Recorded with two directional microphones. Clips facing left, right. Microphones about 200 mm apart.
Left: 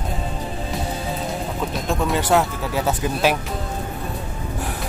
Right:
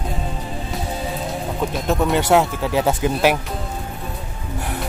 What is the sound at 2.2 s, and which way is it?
Speech, 15° right (ahead or behind).